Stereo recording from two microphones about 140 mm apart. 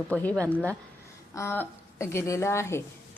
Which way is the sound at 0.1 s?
10° left (ahead or behind).